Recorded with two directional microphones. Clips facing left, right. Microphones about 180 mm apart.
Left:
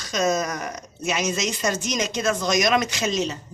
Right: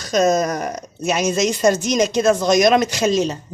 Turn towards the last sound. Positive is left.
turn(degrees=-35)  # may be behind; listen again after turning